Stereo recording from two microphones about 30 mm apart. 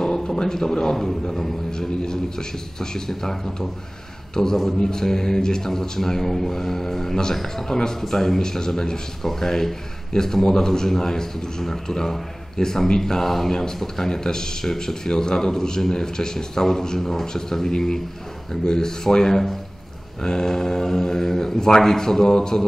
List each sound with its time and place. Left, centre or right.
0.0 s a man's voice: centre
8.0 s speech: centre
8.4 s a man's voice: left
13.0 s a man's voice: centre